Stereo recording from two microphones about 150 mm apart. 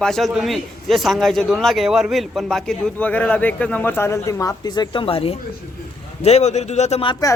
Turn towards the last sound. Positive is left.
turn(degrees=40)  # may be behind; listen again after turning